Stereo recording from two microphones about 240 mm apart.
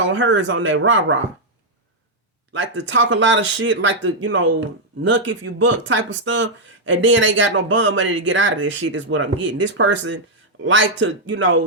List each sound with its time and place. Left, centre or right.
0.0 s speech: right
2.5 s speech: right